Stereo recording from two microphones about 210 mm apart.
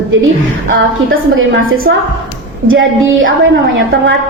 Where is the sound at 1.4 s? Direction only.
75° right (ahead or behind).